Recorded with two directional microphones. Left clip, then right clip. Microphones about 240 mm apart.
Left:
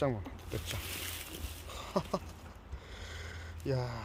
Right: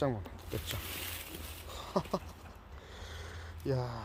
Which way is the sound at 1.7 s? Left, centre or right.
Centre.